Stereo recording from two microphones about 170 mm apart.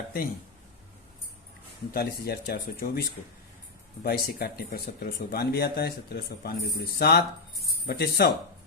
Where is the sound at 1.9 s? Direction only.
65° left (ahead or behind).